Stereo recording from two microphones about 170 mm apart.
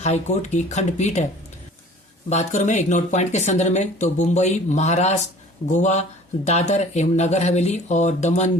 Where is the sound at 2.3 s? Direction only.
45° left (ahead or behind).